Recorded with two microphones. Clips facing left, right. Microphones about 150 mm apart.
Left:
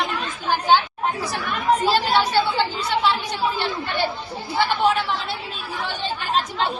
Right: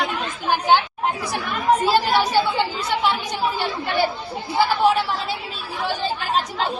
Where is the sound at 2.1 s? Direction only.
15° right (ahead or behind).